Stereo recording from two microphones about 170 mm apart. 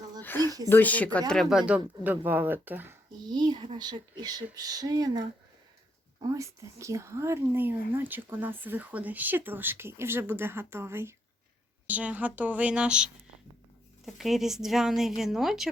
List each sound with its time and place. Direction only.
0.2 s a sound: 15° left (ahead or behind)
0.7 s speech: 10° left (ahead or behind); by 3.0 s 10° right (ahead or behind)
3.2 s speech: 25° right (ahead or behind)
6.2 s speech: 20° right (ahead or behind); by 15.7 s centre (ahead or behind)